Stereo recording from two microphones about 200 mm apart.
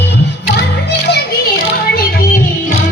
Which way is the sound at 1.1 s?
50° left (ahead or behind).